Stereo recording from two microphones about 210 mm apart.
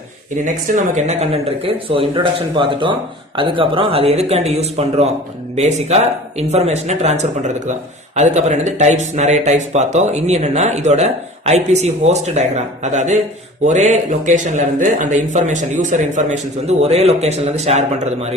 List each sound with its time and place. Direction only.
0.4 s speech: 35° right (ahead or behind)